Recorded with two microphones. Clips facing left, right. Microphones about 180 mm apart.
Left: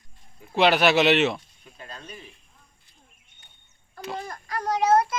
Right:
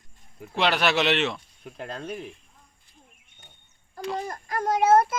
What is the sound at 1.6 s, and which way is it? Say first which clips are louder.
Speech: right 8 dB; 60° right (ahead or behind).